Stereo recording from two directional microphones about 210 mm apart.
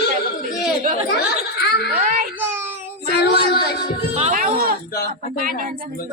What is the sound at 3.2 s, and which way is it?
Child singing, 50° left (ahead or behind).